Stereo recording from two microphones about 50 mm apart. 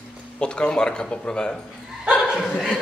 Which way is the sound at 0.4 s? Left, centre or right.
Centre.